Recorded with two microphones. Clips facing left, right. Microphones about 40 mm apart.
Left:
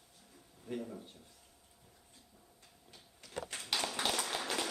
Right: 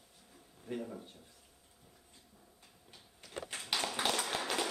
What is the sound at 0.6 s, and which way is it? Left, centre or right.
Speech, centre.